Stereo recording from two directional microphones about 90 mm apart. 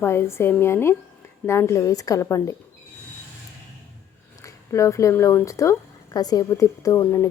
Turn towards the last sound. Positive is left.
turn(degrees=30)  # may be behind; listen again after turning